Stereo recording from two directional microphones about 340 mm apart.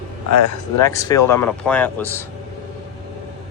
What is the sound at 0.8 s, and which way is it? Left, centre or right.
A man's voice, centre.